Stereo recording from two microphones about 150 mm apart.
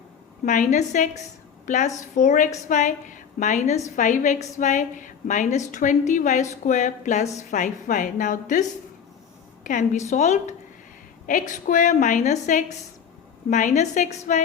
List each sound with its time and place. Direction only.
0.4 s a woman's voice: 55° left (ahead or behind)
9.6 s a woman's voice: 55° left (ahead or behind)